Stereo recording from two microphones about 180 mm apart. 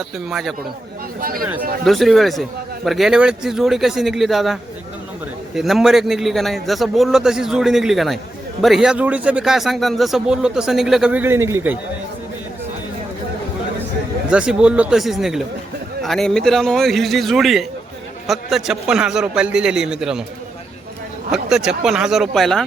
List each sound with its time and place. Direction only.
0.3 s speech: centre (ahead or behind)
1.2 s speech: 55° right (ahead or behind)
1.8 s speech: centre (ahead or behind)
5.5 s speech: centre (ahead or behind)
14.3 s speech: 5° right (ahead or behind)
21.2 s speech: 5° right (ahead or behind)